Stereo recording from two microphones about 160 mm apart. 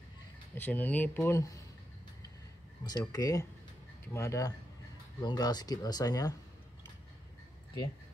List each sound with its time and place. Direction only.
0.6 s speech: 10° left (ahead or behind)
3.0 s speech: 20° left (ahead or behind)